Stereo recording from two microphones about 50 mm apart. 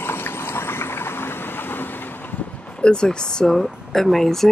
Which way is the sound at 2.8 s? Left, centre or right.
Centre.